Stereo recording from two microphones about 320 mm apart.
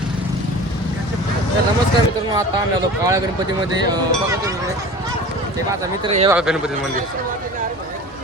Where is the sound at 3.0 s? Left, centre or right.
Centre.